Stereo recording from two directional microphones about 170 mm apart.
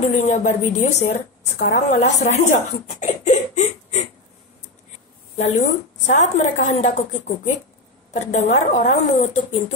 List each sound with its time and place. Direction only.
0.1 s a woman's voice: 40° left (ahead or behind)
3.0 s a sound: 45° left (ahead or behind)
5.4 s a woman's voice: 45° left (ahead or behind)